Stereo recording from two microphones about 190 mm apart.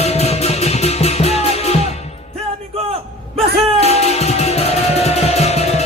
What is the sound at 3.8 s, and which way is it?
Music, 35° left (ahead or behind).